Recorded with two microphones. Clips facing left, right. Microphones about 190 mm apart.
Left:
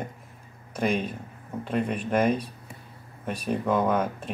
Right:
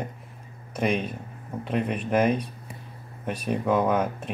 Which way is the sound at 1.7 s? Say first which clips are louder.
Right 1 dB; 5° right (ahead or behind).